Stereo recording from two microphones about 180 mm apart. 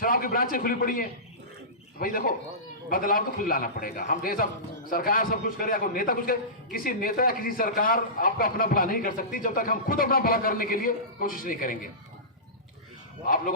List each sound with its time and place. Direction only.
0.0 s a man's voice: 50° left (ahead or behind)
13.2 s a man's voice: 50° left (ahead or behind)